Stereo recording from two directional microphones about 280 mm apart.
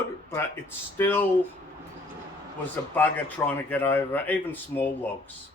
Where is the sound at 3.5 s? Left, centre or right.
Centre.